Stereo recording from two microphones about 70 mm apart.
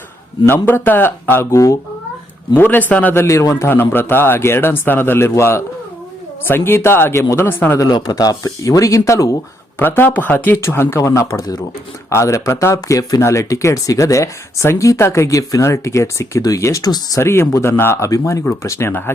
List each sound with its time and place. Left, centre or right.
0.4 s speech: left
2.6 s a man's voice: left
3.2 s speech: left
3.7 s speech: left
7.9 s speech: left
9.7 s speech: left
13.2 s speech: left
17.2 s speech: left
18.0 s speech: left
18.9 s speech: left